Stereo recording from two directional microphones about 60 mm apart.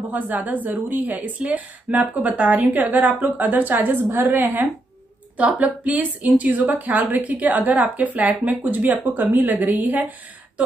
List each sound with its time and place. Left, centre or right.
0.1 s a woman's voice: right
5.4 s a woman's voice: right